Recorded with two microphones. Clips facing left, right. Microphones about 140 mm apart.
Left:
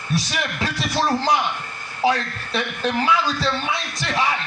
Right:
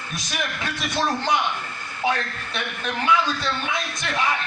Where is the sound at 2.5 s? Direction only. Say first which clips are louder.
Left 6 dB; 35° left (ahead or behind).